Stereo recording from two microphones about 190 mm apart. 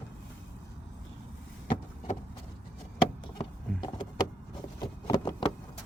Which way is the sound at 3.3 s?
25° left (ahead or behind).